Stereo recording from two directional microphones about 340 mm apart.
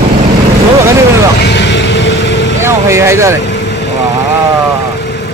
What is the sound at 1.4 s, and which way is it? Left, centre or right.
Music, left.